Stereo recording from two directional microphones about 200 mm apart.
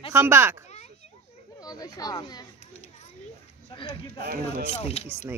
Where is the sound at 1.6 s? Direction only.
20° left (ahead or behind).